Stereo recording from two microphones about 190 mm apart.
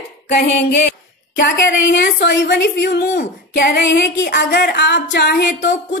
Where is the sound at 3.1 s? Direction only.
50° left (ahead or behind).